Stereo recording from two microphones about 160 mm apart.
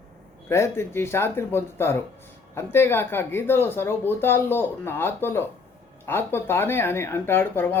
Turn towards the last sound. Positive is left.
turn(degrees=15)  # may be behind; listen again after turning